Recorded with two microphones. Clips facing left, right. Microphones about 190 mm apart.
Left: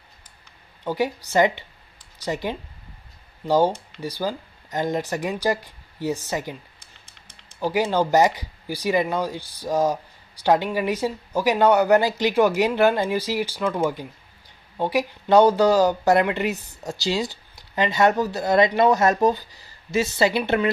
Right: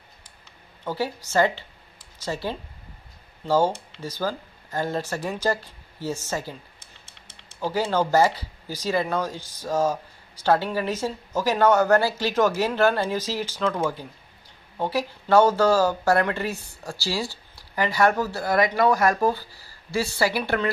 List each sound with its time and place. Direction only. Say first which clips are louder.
0.8 s a woman's voice: left 4 dB; 15° left (ahead or behind)
7.6 s a woman's voice: left 2 dB; 15° left (ahead or behind)